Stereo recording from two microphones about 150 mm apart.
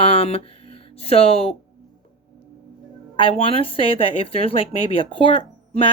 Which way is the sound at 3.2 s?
35° left (ahead or behind).